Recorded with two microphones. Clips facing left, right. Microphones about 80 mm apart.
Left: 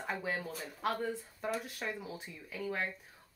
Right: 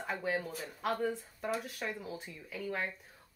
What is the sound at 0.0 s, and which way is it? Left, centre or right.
Speech, centre.